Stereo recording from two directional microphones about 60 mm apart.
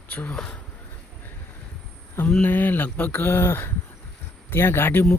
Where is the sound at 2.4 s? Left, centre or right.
Left.